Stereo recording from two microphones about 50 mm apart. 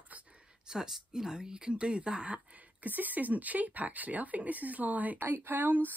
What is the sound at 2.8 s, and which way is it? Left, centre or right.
A woman's voice, right.